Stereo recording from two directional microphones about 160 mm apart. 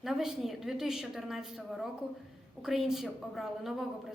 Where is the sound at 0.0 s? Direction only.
Centre (ahead or behind).